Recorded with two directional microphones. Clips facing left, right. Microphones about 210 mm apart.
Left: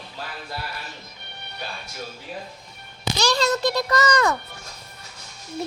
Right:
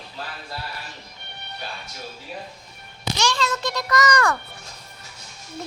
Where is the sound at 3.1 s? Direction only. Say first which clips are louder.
Left 3 dB; 35° left (ahead or behind); by 4.4 s 20° left (ahead or behind).